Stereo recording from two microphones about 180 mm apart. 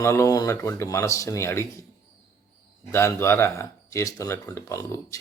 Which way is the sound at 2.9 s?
15° left (ahead or behind).